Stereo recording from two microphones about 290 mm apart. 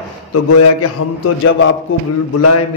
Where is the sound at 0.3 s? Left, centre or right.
Left.